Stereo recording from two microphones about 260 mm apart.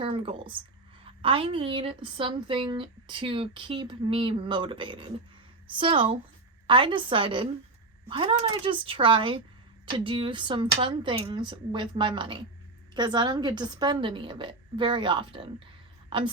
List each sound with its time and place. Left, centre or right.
0.0 s a woman's voice: right